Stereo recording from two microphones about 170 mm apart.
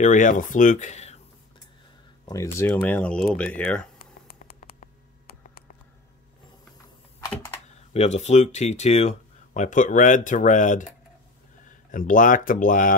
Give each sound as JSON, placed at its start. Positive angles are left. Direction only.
{"t": 0.0, "sound": "speech", "side_deg": 50}
{"t": 2.2, "sound": "speech", "side_deg": 20}
{"t": 4.3, "sound": "mouse", "side_deg": 65}
{"t": 7.2, "sound": "computer keyboard", "side_deg": 20}
{"t": 7.9, "sound": "speech", "side_deg": 40}
{"t": 11.9, "sound": "speech", "side_deg": 50}